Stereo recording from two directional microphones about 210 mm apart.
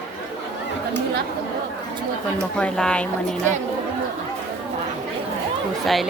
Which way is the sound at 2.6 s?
5° left (ahead or behind).